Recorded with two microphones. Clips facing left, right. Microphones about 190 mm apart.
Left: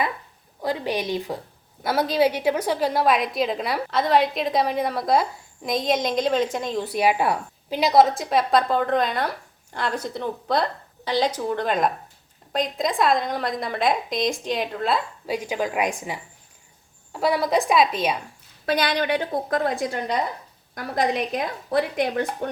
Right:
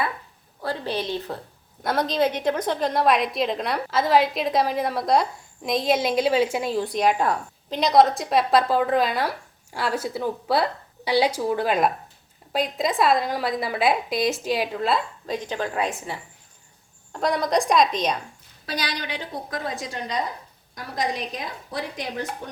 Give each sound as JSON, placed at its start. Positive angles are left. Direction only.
{"t": 0.6, "sound": "a woman's voice", "side_deg": 15}
{"t": 6.8, "sound": "a woman's voice", "side_deg": 5}
{"t": 15.3, "sound": "a woman's voice", "side_deg": 10}
{"t": 18.6, "sound": "a woman's voice", "side_deg": 55}